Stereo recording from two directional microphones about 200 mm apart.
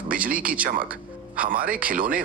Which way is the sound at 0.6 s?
45° right (ahead or behind).